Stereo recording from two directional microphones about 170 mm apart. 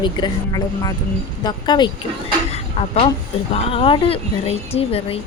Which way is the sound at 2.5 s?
35° left (ahead or behind).